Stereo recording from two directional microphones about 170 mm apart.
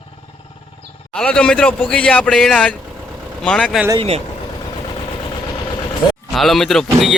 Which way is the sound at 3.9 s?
35° right (ahead or behind).